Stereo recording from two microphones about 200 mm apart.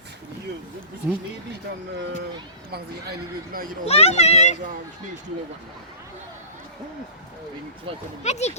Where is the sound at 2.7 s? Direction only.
55° right (ahead or behind).